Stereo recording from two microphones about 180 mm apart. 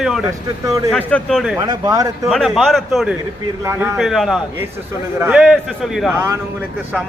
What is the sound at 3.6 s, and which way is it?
Speech, 15° right (ahead or behind).